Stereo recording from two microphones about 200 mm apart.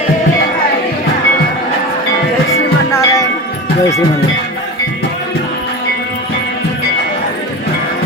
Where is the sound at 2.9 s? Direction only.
15° left (ahead or behind).